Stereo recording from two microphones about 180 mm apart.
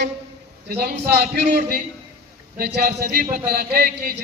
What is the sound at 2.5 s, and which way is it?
A man's voice, 60° right (ahead or behind).